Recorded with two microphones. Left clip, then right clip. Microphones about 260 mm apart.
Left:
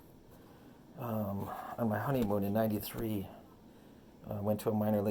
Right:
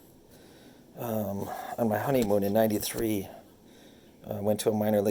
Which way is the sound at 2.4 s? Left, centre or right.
Right.